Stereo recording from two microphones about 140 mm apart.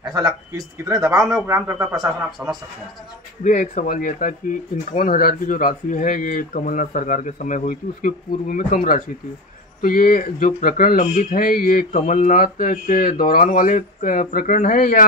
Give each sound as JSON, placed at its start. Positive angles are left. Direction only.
{"t": 0.8, "sound": "speech", "side_deg": -20}
{"t": 3.4, "sound": "speech", "side_deg": 65}
{"t": 4.9, "sound": "speech", "side_deg": 90}
{"t": 11.1, "sound": "speech", "side_deg": 85}